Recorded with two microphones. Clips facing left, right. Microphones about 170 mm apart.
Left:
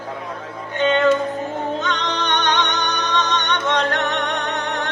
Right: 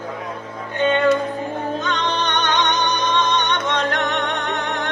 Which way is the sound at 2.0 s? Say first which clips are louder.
Right 2 dB; 75° left (ahead or behind).